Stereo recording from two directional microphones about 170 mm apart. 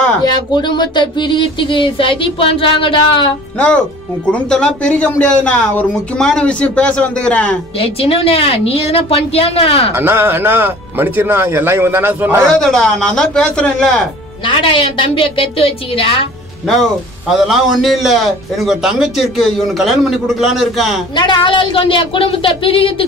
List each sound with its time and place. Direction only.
0.2 s speech: 25° left (ahead or behind)
3.5 s a man's voice: 10° left (ahead or behind)
7.8 s speech: 35° left (ahead or behind)
9.9 s speech: 15° right (ahead or behind)
12.4 s a man's voice: 5° left (ahead or behind)
14.4 s speech: 30° left (ahead or behind)
17.3 s a man's voice: centre (ahead or behind)
21.2 s speech: 30° left (ahead or behind)